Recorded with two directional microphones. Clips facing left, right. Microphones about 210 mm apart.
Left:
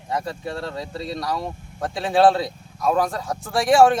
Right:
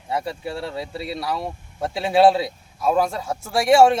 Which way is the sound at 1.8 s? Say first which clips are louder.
Right 1 dB; 25° right (ahead or behind).